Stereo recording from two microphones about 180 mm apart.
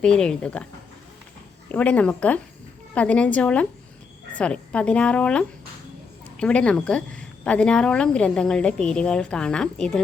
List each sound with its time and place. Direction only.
0.0 s speech: 5° left (ahead or behind)
1.7 s a woman's voice: 5° left (ahead or behind)